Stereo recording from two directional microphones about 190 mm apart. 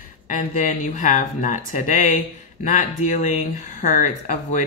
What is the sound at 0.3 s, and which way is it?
Speech, 45° left (ahead or behind).